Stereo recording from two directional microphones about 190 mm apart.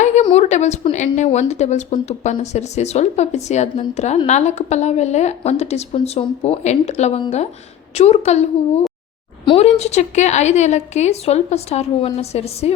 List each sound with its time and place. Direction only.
0.0 s a sound: 40° left (ahead or behind)
0.3 s speech: 35° left (ahead or behind)
9.5 s speech: 35° left (ahead or behind)